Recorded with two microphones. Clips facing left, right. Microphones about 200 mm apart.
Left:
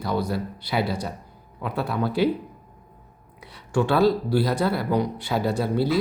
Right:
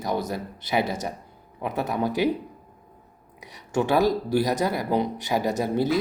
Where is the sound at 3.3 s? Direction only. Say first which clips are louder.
Left 1 dB; 15° right (ahead or behind).